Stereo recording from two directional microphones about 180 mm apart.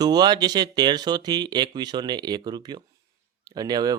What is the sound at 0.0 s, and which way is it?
Speech, 20° right (ahead or behind).